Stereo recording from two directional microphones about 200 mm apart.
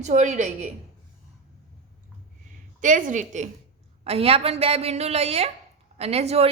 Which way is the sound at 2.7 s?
40° right (ahead or behind).